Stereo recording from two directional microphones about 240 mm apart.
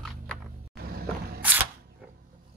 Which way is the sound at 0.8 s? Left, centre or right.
Right.